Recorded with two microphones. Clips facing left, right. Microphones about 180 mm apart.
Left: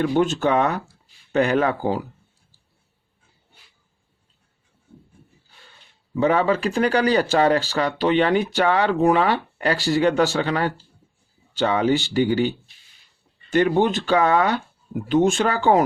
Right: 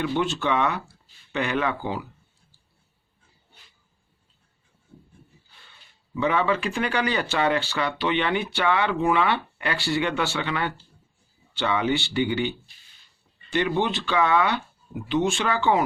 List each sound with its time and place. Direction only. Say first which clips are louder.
0.0 s speech: left 6 dB; 40° left (ahead or behind)
6.1 s speech: left 4 dB; 40° left (ahead or behind)